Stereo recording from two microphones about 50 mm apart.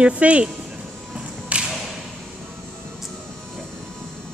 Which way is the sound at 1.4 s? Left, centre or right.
Right.